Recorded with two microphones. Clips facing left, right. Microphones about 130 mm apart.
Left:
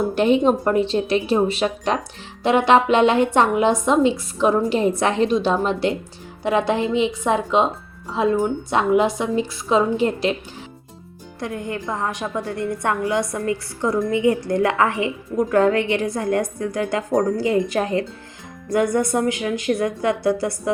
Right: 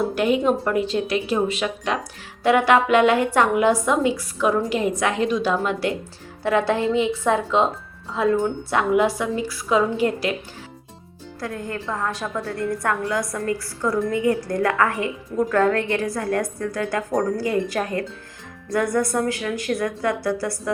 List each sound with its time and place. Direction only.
0.1 s a woman's voice: 25° left (ahead or behind)
2.4 s a woman's voice: 25° left (ahead or behind)
11.3 s a woman's voice: 20° left (ahead or behind)